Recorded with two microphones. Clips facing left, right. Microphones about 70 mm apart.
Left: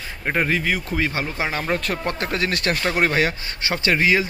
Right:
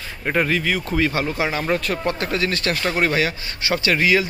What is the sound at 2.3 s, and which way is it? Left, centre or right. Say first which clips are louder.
Speech: right 1 dB; left.